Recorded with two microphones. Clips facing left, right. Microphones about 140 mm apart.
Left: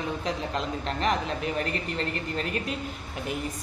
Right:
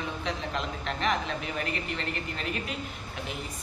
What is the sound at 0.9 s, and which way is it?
Speech, 35° left (ahead or behind).